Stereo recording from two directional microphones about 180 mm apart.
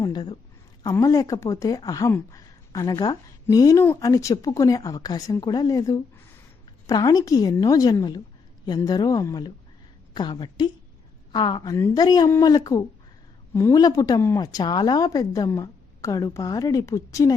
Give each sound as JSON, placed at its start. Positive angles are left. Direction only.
{"t": 0.0, "sound": "a woman's voice", "side_deg": 25}